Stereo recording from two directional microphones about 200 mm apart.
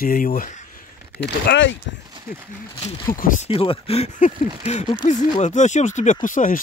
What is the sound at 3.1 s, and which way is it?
Speech, 40° left (ahead or behind).